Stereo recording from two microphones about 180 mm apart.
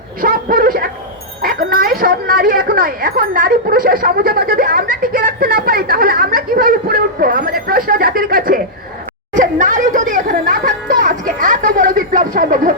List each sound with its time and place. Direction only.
0.2 s a sound: 50° right (ahead or behind)
1.4 s a woman's voice: 50° right (ahead or behind)
9.3 s music: 45° right (ahead or behind)